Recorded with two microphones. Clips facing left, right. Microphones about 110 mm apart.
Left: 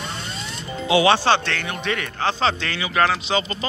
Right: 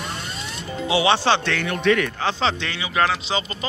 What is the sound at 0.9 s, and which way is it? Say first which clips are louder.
Speech: left 2 dB; 25° right (ahead or behind).